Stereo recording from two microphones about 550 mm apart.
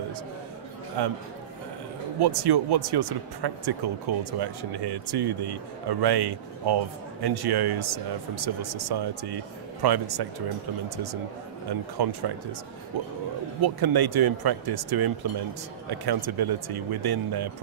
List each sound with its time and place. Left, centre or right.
1.0 s speech: right
2.1 s speech: right
12.0 s speech: right
13.6 s speech: right